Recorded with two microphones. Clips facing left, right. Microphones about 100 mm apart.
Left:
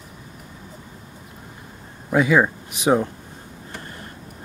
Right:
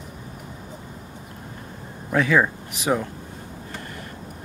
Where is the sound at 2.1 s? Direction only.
15° left (ahead or behind).